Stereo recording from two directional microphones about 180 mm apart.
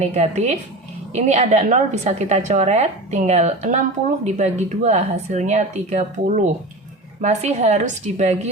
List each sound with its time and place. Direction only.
0.0 s a woman's voice: 40° right (ahead or behind)